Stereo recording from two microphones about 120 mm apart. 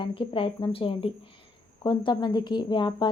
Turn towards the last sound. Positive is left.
turn(degrees=40)  # may be behind; listen again after turning